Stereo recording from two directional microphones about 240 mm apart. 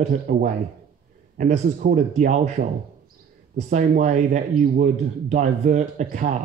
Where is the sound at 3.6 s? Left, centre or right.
Right.